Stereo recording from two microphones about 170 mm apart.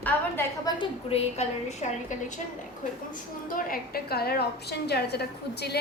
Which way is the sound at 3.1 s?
55° left (ahead or behind).